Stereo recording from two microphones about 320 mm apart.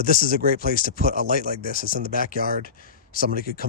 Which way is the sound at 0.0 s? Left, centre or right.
Left.